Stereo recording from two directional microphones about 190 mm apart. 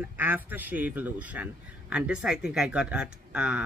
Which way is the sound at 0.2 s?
10° right (ahead or behind).